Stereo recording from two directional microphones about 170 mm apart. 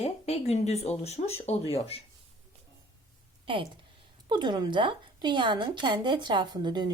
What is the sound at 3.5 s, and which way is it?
Speech, 30° right (ahead or behind).